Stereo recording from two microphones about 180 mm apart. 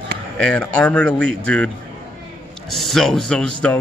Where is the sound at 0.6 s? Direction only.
5° left (ahead or behind).